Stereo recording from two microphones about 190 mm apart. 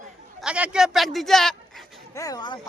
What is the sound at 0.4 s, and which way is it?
A man's voice, 5° right (ahead or behind).